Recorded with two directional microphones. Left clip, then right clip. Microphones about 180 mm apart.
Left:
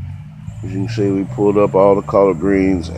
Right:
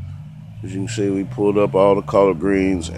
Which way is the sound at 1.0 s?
10° right (ahead or behind).